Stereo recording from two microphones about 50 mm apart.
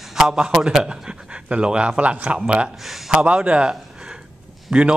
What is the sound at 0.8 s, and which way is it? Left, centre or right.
Speech, right.